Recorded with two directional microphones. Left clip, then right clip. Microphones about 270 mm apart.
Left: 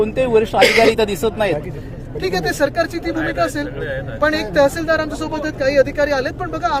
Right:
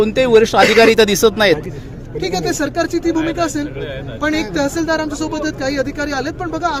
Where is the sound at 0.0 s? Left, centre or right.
Right.